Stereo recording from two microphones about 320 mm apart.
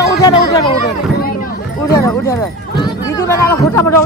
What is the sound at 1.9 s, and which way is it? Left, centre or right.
A man's voice, centre.